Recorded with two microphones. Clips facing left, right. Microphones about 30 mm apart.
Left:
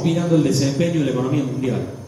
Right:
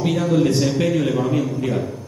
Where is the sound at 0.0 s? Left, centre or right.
Centre.